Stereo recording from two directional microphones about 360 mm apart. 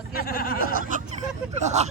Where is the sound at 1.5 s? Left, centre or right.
Centre.